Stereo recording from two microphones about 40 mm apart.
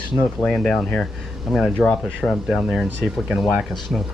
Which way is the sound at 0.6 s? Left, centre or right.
Centre.